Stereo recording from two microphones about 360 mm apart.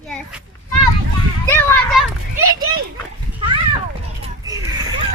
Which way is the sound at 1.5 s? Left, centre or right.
Centre.